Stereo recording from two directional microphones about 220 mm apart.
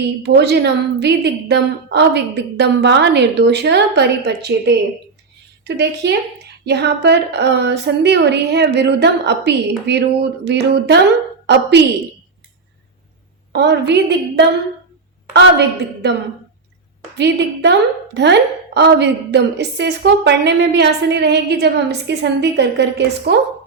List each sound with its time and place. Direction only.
0.2 s a woman's voice: 50° right (ahead or behind)
13.5 s a woman's voice: 50° right (ahead or behind)
17.2 s a woman's voice: 50° right (ahead or behind)